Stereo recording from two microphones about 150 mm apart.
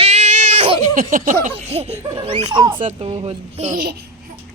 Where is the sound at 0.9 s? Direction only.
65° right (ahead or behind).